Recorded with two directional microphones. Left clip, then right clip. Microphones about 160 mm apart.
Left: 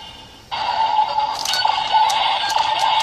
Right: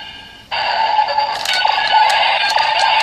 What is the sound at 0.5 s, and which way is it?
Music, 35° right (ahead or behind).